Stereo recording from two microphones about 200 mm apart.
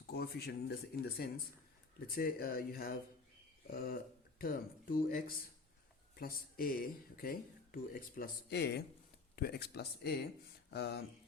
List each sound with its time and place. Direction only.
0.1 s speech: 50° left (ahead or behind)